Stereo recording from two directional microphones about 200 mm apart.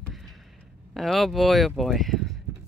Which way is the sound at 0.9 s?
Centre (ahead or behind).